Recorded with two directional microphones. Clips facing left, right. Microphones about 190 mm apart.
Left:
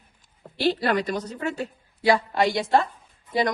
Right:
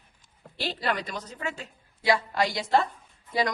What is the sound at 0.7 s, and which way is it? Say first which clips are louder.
Speech: left 7 dB; 45° left (ahead or behind).